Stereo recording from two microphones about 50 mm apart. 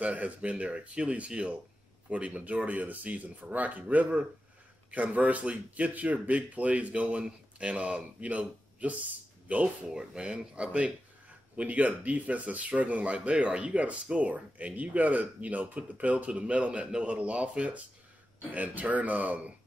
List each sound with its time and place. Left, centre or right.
0.0 s speech: right
9.8 s speech: centre